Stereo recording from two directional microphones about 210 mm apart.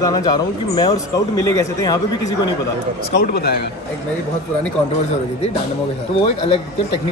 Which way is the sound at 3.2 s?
50° left (ahead or behind).